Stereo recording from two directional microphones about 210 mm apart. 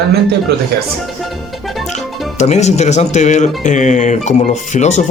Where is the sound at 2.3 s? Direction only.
35° left (ahead or behind).